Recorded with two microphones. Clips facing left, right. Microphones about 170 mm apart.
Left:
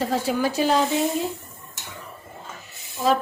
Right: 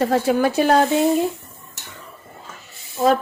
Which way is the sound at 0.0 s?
60° right (ahead or behind).